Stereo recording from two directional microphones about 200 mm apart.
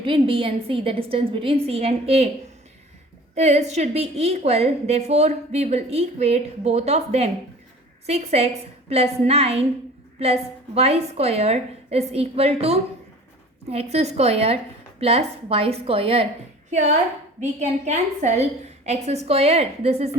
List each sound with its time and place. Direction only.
0.0 s a woman's voice: 25° right (ahead or behind)
3.3 s a woman's voice: 35° right (ahead or behind)
17.4 s a woman's voice: 35° right (ahead or behind)